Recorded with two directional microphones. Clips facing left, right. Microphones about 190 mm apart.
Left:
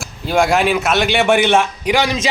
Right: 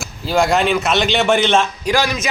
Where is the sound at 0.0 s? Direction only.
Centre (ahead or behind).